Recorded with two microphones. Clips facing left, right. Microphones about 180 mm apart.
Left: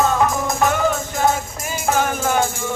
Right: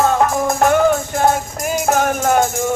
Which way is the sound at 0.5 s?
50° right (ahead or behind).